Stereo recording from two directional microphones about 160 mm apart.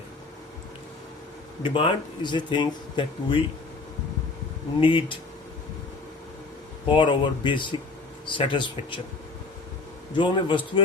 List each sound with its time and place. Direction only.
1.6 s speech: 30° left (ahead or behind)
4.8 s speech: 30° left (ahead or behind)
6.8 s speech: 30° left (ahead or behind)
10.2 s speech: 30° left (ahead or behind)